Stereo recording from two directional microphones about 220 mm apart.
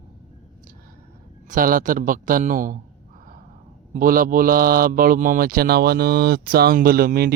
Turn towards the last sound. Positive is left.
turn(degrees=-45)  # may be behind; listen again after turning